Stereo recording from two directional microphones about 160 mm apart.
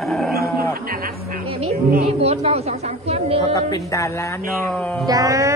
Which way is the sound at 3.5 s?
20° left (ahead or behind).